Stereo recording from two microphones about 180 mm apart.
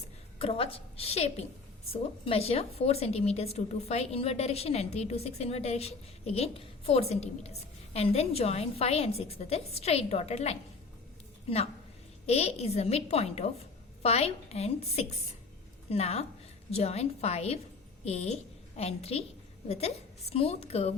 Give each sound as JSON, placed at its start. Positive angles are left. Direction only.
{"t": 0.3, "sound": "a woman's voice", "side_deg": 30}